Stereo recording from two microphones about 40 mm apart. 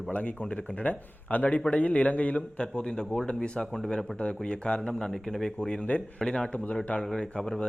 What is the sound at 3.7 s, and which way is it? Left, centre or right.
Speech, centre.